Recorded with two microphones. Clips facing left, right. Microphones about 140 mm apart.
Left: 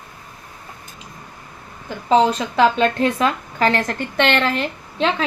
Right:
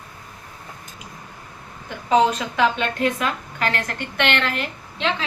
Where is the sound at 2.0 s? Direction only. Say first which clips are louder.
Left 2 dB; 35° left (ahead or behind).